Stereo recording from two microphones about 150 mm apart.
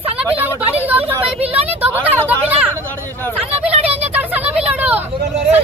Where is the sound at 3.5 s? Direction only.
40° right (ahead or behind).